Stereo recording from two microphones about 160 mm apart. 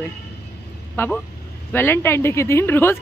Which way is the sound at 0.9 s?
10° left (ahead or behind).